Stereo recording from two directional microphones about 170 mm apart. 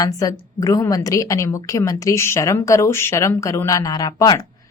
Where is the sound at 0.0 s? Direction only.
20° left (ahead or behind).